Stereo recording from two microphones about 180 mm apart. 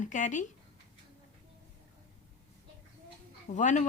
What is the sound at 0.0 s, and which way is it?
Speech, 45° left (ahead or behind).